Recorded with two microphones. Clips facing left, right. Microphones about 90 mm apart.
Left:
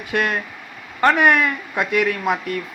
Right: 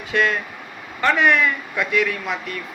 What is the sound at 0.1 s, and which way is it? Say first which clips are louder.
A man's voice: right 1 dB; 50° left (ahead or behind).